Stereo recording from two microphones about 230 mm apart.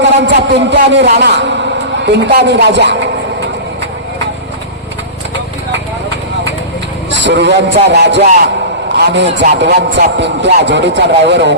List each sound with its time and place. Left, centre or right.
0.0 s a man's voice: right
7.2 s a man's voice: right